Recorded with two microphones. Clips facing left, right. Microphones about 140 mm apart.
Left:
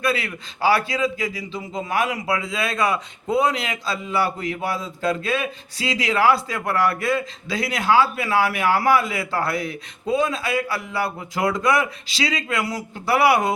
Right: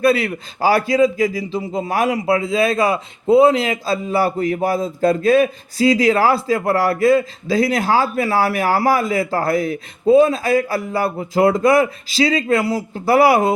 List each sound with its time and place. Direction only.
0.0 s a man's voice: 35° right (ahead or behind)